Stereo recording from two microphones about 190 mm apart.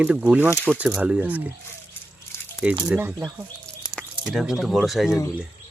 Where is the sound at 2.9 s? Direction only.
10° right (ahead or behind).